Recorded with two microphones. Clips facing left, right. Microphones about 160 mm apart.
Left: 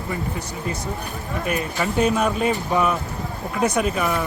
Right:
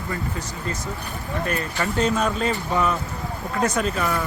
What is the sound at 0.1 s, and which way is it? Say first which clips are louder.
Speech: left 2 dB; 10° left (ahead or behind).